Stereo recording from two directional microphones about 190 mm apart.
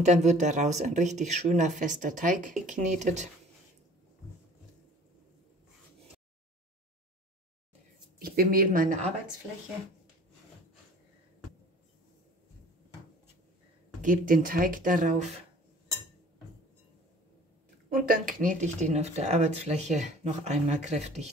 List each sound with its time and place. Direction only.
0.0 s speech: 40° right (ahead or behind)
8.2 s speech: 50° right (ahead or behind)
14.0 s speech: 45° right (ahead or behind)
17.8 s speech: 45° right (ahead or behind)